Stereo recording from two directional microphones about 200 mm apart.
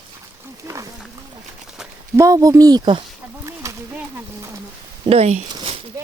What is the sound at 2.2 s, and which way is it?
Speech, 15° right (ahead or behind).